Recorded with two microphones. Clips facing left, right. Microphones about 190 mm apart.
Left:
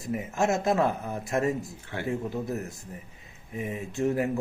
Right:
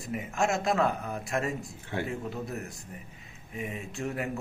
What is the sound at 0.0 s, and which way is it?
Speech, 25° left (ahead or behind).